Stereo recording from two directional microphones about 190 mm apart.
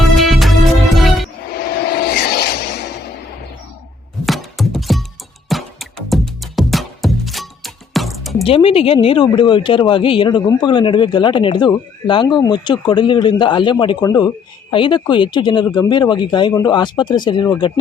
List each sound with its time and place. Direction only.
0.2 s music: centre (ahead or behind)
1.5 s vehicle: 55° left (ahead or behind)
4.3 s music: centre (ahead or behind)
8.4 s a woman's voice: 30° left (ahead or behind)